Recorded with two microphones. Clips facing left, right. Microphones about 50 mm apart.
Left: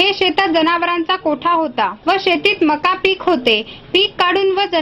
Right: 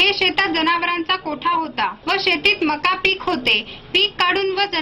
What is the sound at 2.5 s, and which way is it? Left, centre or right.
Speech, centre.